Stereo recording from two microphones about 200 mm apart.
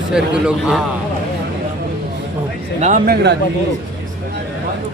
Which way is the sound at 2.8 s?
40° right (ahead or behind).